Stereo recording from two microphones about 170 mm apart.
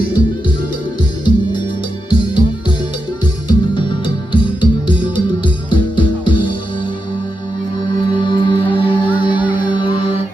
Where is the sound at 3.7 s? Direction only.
30° left (ahead or behind).